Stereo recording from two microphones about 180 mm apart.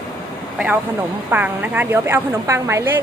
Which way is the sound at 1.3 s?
10° right (ahead or behind).